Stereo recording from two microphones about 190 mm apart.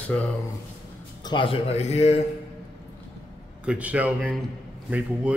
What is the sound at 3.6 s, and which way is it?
A man's voice, 5° right (ahead or behind).